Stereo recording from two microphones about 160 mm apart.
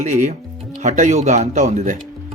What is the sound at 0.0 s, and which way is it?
Speech, 50° right (ahead or behind).